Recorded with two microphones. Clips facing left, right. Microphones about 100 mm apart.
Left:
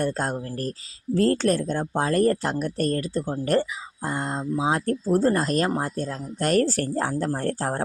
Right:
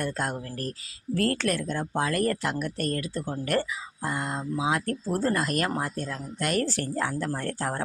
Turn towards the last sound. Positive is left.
turn(degrees=35)  # may be behind; listen again after turning